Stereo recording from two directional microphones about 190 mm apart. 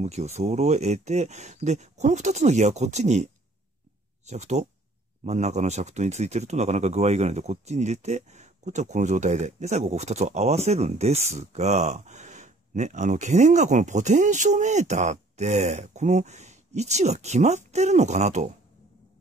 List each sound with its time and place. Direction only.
0.0 s speech: 35° right (ahead or behind)
4.3 s speech: 40° right (ahead or behind)